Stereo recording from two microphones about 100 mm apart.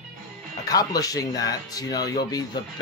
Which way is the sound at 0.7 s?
40° left (ahead or behind).